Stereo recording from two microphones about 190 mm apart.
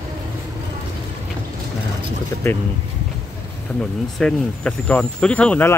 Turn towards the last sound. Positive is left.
turn(degrees=10)  # may be behind; listen again after turning